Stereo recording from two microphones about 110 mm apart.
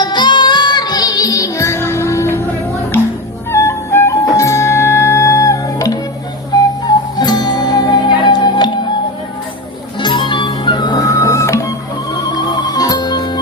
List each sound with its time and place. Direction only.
0.0 s music: 40° left (ahead or behind); by 2.5 s 25° left (ahead or behind)
3.5 s music: 25° left (ahead or behind); by 8.7 s 40° left (ahead or behind)
10.0 s music: 45° left (ahead or behind)